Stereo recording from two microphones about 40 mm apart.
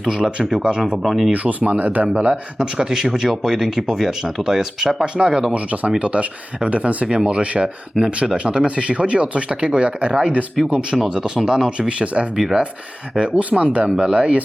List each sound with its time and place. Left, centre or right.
0.1 s speech: right
1.0 s speech: centre
1.3 s speech: right
2.6 s speech: centre
5.0 s speech: right
5.5 s speech: right
10.9 s speech: centre; by 14.4 s right